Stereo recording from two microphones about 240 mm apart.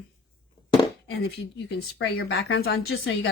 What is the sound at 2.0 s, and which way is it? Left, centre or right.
Speech, left.